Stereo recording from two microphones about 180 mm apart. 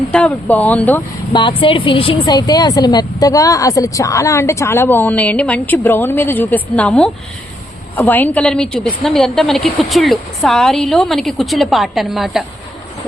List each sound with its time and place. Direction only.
0.1 s speech: 5° left (ahead or behind)
1.3 s a woman's voice: 25° left (ahead or behind); by 12.5 s centre (ahead or behind)